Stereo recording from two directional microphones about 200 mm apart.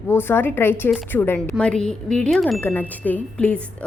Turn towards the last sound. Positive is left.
turn(degrees=5)  # may be behind; listen again after turning